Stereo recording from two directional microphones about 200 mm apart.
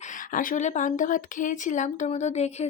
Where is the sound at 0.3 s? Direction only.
40° left (ahead or behind).